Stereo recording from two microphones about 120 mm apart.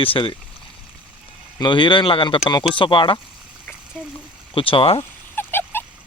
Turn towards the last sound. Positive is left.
turn(degrees=15)  # may be behind; listen again after turning